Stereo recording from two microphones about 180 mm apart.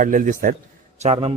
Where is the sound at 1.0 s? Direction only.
35° right (ahead or behind).